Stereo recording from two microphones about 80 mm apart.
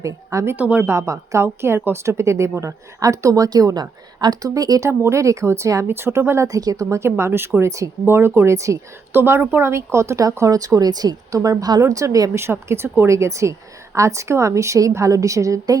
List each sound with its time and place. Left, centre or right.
0.0 s speech: right
0.5 s speech: centre
0.9 s a woman's voice: right
4.9 s speech: right
6.9 s a woman's voice: right
12.4 s speech: right